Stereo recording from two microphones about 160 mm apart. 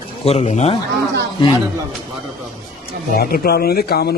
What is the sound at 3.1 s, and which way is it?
A man's voice, 70° left (ahead or behind).